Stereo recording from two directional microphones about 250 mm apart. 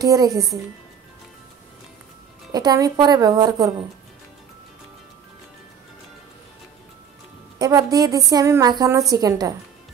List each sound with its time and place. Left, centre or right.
0.0 s a woman's voice: centre
2.5 s a woman's voice: centre
7.5 s a woman's voice: centre